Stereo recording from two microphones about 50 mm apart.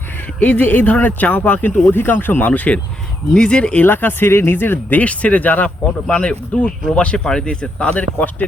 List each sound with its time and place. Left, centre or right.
0.3 s speech: left
2.5 s speech: left
3.8 s speech: left
4.9 s speech: left
6.1 s speech: left